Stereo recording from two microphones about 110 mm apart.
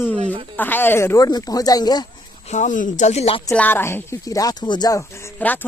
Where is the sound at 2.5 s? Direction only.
90° left; by 3.4 s 75° left (ahead or behind).